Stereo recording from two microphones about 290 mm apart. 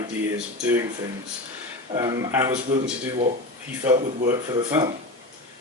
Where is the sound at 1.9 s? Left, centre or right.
Centre.